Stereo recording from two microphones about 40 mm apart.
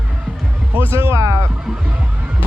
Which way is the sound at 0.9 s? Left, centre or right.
Right.